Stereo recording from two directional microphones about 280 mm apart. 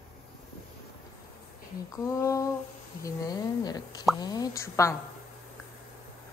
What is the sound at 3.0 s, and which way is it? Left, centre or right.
Plop, centre.